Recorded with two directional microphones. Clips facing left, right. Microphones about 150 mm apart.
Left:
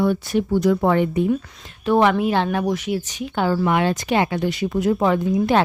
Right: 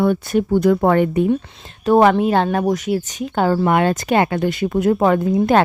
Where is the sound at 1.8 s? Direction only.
40° right (ahead or behind).